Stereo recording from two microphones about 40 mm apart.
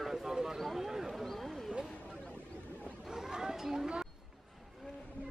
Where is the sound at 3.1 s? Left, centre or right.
Centre.